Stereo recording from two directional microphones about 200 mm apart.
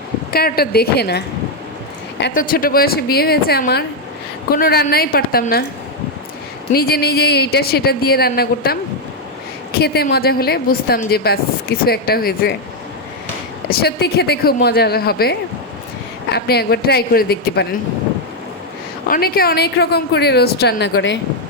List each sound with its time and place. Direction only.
0.3 s a woman's voice: 50° left (ahead or behind)
6.7 s a woman's voice: 50° left (ahead or behind)
13.7 s a woman's voice: 50° left (ahead or behind)
19.0 s a woman's voice: 45° left (ahead or behind)
20.9 s a woman's voice: 70° left (ahead or behind)